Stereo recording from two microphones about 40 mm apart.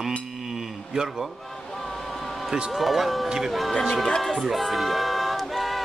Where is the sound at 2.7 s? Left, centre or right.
Centre.